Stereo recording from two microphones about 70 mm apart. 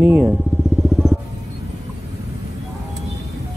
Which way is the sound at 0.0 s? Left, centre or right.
Right.